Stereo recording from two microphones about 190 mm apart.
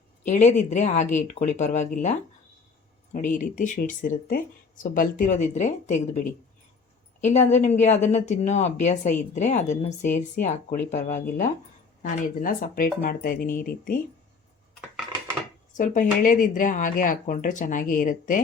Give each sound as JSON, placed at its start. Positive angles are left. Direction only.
{"t": 0.3, "sound": "speech", "side_deg": 40}
{"t": 7.2, "sound": "a woman's voice", "side_deg": 40}
{"t": 15.7, "sound": "speech", "side_deg": 45}